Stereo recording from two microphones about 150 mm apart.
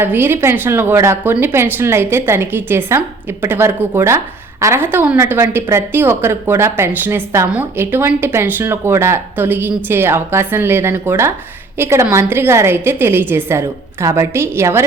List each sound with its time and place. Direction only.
0.0 s a woman's voice: 15° right (ahead or behind)